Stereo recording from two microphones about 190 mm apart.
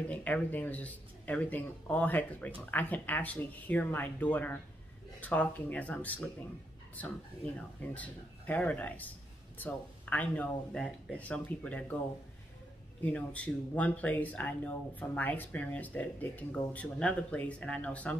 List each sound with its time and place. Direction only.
0.1 s speech: 10° left (ahead or behind)
13.0 s speech: 5° left (ahead or behind)